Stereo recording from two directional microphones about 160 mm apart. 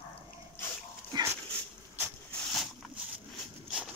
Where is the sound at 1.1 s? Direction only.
20° right (ahead or behind).